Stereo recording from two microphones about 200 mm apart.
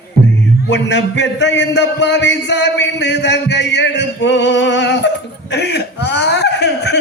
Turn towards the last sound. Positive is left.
turn(degrees=55)  # may be behind; listen again after turning